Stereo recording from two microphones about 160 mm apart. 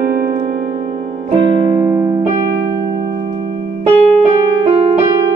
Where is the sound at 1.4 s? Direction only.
35° right (ahead or behind).